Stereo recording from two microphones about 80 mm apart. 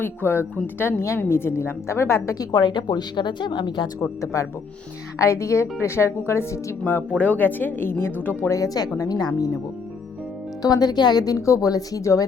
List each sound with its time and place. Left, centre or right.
0.0 s a woman's voice: left
2.3 s a woman's voice: left
4.2 s a woman's voice: left
7.1 s a woman's voice: centre; by 9.5 s left
10.6 s speech: left